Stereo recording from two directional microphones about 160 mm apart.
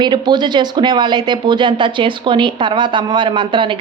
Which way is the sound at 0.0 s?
25° right (ahead or behind).